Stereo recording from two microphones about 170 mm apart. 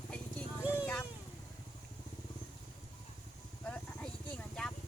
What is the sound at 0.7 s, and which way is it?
Vehicle, 10° left (ahead or behind).